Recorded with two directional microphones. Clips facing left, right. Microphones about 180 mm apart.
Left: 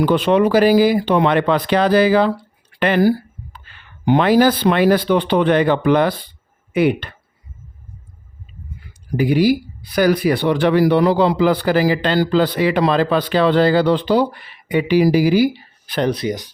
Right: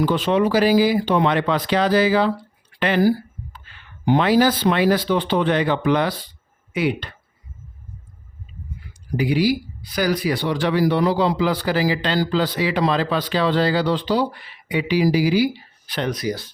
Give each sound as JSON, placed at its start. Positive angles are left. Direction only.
{"t": 0.0, "sound": "speech", "side_deg": 60}
{"t": 2.7, "sound": "a sound", "side_deg": 55}
{"t": 4.0, "sound": "speech", "side_deg": 60}
{"t": 8.9, "sound": "speech", "side_deg": 50}
{"t": 16.0, "sound": "speech", "side_deg": 30}